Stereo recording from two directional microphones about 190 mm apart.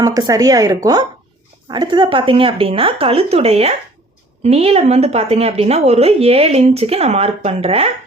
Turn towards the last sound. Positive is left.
turn(degrees=-30)  # may be behind; listen again after turning